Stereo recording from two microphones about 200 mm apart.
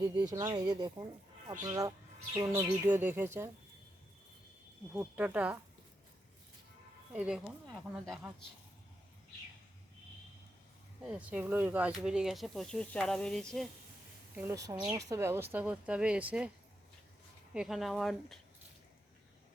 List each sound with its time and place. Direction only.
0.3 s speech: 20° right (ahead or behind)
4.9 s speech: 5° right (ahead or behind)
7.1 s speech: 5° right (ahead or behind)
11.0 s speech: 5° right (ahead or behind)
14.3 s speech: 15° right (ahead or behind)
17.5 s speech: 5° right (ahead or behind)